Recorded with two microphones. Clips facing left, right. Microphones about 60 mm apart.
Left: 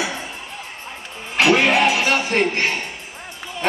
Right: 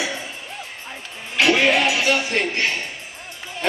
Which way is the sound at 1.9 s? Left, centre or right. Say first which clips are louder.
Left 2 dB; left.